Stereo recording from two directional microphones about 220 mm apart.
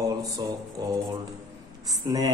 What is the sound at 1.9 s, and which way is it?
Speech, 15° right (ahead or behind).